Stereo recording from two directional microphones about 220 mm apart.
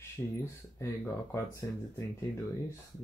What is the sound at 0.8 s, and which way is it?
Speech, 10° left (ahead or behind).